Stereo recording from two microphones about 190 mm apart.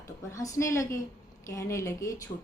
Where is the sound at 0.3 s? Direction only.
15° left (ahead or behind).